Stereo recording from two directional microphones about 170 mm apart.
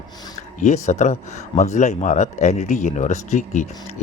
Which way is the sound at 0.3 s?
45° left (ahead or behind).